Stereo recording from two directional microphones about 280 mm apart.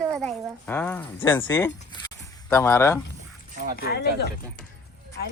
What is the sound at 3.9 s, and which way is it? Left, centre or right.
Speech, left.